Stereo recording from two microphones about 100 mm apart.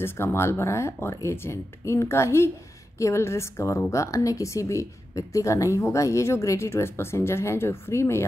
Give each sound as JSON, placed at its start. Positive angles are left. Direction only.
{"t": 0.0, "sound": "speech", "side_deg": 25}